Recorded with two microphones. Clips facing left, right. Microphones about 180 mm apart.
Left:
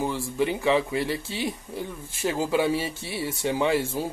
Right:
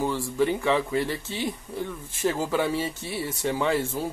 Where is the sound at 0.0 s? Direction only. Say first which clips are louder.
Right 1 dB; 15° left (ahead or behind).